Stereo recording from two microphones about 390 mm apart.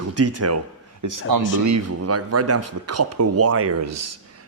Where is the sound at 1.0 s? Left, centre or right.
Right.